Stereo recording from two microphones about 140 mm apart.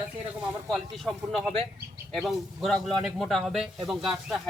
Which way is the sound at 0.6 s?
Centre (ahead or behind).